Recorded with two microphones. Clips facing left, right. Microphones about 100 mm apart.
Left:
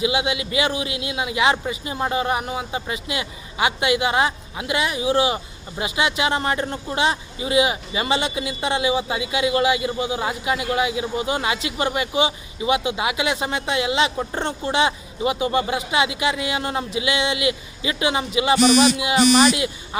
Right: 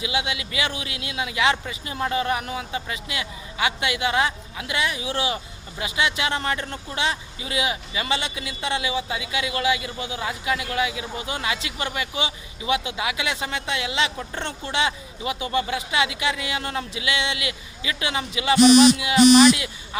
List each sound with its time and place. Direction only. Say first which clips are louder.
0.0 s a man's voice: left 5 dB; 20° left (ahead or behind)
19.1 s speech: right 2 dB; 40° left (ahead or behind)
19.5 s speech: left 7 dB; 25° left (ahead or behind)